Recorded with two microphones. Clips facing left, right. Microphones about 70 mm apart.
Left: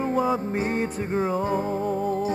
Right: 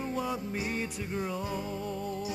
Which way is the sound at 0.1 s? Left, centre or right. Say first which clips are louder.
Left 10 dB; left.